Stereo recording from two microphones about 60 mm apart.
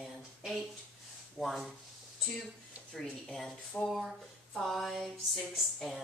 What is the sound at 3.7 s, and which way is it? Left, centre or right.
Speech, left.